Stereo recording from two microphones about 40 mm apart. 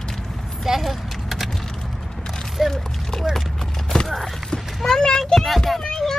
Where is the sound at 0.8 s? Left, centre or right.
Centre.